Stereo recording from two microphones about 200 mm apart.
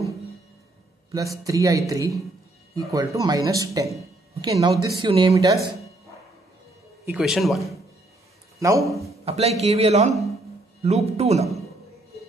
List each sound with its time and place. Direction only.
1.4 s speech: 15° right (ahead or behind)
7.1 s speech: centre (ahead or behind)
8.5 s a man's voice: 15° right (ahead or behind)
8.8 s a man's voice: centre (ahead or behind)
9.2 s a man's voice: 30° right (ahead or behind)